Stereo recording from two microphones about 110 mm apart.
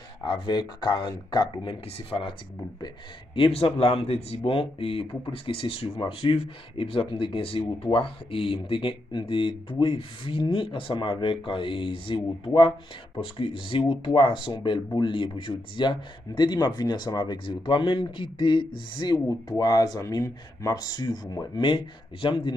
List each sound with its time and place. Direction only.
0.2 s speech: 45° left (ahead or behind)
1.9 s a man's voice: 60° left (ahead or behind)
3.3 s a man's voice: 55° left (ahead or behind)
4.4 s speech: 55° left (ahead or behind)
19.1 s speech: 30° left (ahead or behind)
21.5 s speech: 50° left (ahead or behind)